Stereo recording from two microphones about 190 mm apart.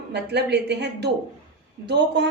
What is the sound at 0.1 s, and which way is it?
Speech, 60° right (ahead or behind).